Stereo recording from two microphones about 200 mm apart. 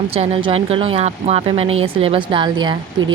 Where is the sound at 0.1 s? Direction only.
30° right (ahead or behind).